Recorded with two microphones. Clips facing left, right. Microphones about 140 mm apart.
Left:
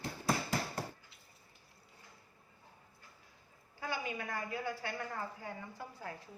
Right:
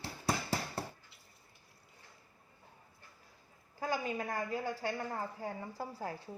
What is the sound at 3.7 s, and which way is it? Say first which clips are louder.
A woman's voice: right 4 dB; 40° right (ahead or behind).